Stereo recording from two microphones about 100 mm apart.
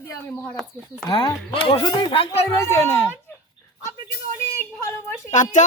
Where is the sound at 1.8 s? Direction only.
40° left (ahead or behind).